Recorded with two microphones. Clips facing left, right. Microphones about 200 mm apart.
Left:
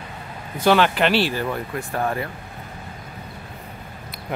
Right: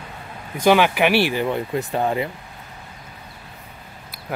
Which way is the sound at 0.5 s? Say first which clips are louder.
Right 1 dB; 15° right (ahead or behind).